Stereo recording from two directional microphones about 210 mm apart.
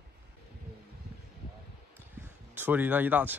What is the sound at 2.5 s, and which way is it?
Speech, 10° right (ahead or behind).